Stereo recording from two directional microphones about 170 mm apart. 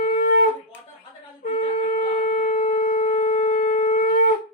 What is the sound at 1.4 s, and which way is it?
Shofar, 45° left (ahead or behind).